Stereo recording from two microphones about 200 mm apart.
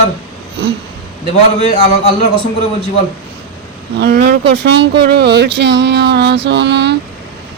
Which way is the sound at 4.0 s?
55° right (ahead or behind).